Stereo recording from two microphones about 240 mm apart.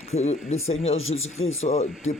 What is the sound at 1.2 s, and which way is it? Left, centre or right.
Speech, left.